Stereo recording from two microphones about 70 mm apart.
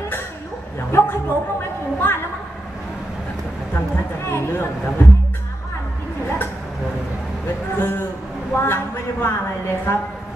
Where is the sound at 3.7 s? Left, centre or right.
Left.